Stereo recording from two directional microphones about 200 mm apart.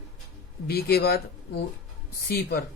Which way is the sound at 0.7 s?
50° left (ahead or behind).